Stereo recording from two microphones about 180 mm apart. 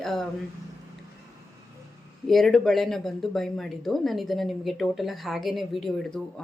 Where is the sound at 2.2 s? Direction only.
Centre (ahead or behind).